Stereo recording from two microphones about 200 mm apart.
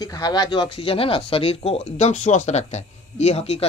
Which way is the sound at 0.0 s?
20° left (ahead or behind).